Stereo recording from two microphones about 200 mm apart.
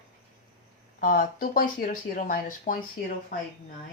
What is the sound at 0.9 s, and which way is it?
Speech, 45° left (ahead or behind).